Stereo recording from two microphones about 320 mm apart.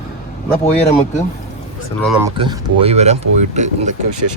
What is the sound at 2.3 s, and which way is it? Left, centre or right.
Speech, centre.